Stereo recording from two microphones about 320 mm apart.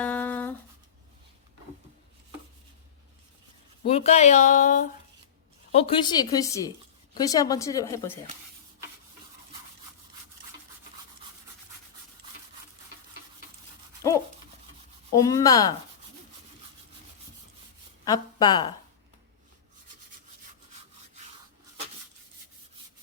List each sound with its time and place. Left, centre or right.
0.0 s a sound: centre
3.8 s a woman's voice: centre
14.0 s toothbrush: centre
15.1 s a woman's voice: centre
18.0 s speech: centre